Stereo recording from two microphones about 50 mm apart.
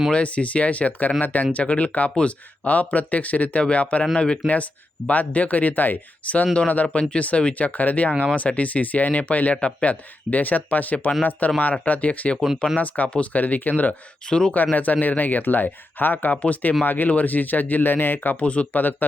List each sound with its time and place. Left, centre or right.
0.1 s speech: left
6.4 s speech: left
14.3 s speech: centre
14.5 s speech: left
16.3 s speech: left
16.8 s speech: left
18.4 s speech: left